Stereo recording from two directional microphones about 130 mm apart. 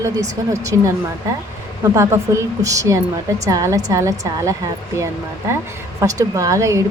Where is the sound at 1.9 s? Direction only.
25° right (ahead or behind).